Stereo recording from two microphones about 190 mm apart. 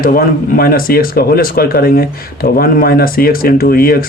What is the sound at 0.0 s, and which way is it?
Speech, 50° left (ahead or behind).